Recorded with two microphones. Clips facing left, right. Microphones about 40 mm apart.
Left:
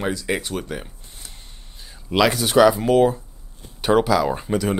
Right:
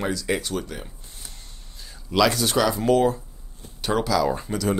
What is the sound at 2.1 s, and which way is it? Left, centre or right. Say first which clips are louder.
Speech: left 2 dB; left.